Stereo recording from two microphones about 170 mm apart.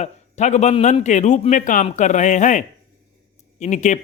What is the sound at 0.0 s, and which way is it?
Speech, 40° left (ahead or behind).